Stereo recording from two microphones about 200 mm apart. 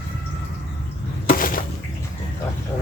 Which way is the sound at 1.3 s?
45° left (ahead or behind).